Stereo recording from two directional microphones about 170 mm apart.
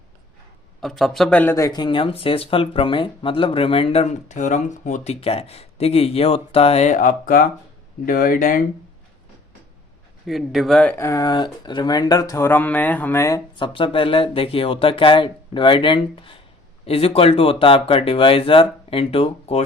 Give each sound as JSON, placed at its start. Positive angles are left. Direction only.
{"t": 0.8, "sound": "speech", "side_deg": 0}
{"t": 10.2, "sound": "speech", "side_deg": 0}
{"t": 13.7, "sound": "speech", "side_deg": 30}